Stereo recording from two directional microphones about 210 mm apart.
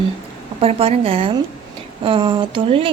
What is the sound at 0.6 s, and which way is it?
Speech, 25° right (ahead or behind).